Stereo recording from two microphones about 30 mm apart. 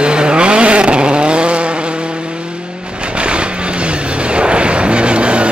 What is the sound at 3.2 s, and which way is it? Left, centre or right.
Vehicle, right.